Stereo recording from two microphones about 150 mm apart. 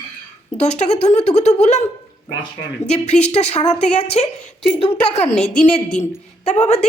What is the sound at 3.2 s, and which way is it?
Speech, 45° left (ahead or behind).